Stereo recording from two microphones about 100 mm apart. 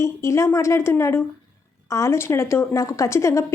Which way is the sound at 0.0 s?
30° left (ahead or behind).